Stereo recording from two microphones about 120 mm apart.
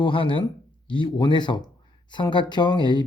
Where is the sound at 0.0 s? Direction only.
45° left (ahead or behind).